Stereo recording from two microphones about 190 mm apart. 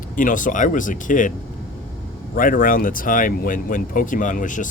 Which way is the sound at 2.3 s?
45° left (ahead or behind).